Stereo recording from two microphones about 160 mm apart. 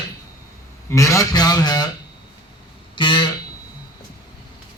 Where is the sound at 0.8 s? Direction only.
20° left (ahead or behind).